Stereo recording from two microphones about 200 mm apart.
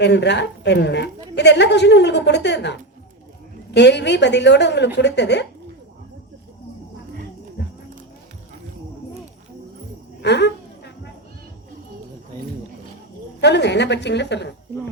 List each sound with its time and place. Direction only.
0.0 s a woman's voice: 60° left (ahead or behind)
3.8 s a woman's voice: 60° left (ahead or behind)
7.6 s clip-clop: 55° left (ahead or behind)
10.2 s a sound: 60° left (ahead or behind)
13.4 s a woman's voice: 60° left (ahead or behind)